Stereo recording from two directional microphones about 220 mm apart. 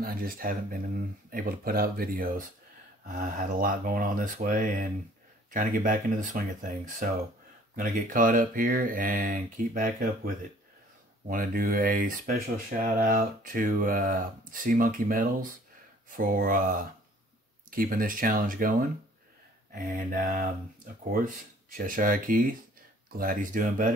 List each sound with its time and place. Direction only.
0.0 s speech: 40° right (ahead or behind)